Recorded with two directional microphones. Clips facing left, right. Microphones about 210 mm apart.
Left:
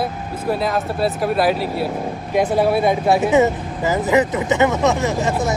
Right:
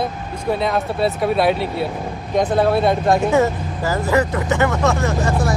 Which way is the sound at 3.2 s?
20° left (ahead or behind).